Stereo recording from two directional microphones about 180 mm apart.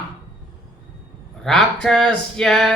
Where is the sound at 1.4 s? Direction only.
Centre (ahead or behind).